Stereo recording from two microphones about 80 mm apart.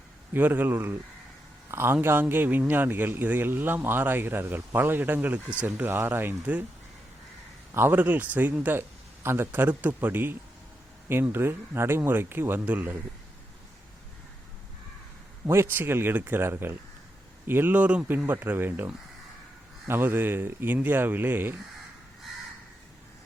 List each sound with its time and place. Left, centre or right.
0.3 s speech: right
7.7 s speech: right
15.4 s speech: right